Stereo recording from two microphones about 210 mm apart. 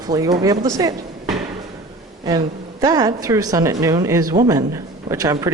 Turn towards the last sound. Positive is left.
turn(degrees=-15)  # may be behind; listen again after turning